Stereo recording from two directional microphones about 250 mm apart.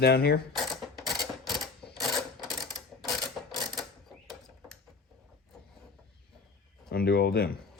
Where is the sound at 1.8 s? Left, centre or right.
Centre.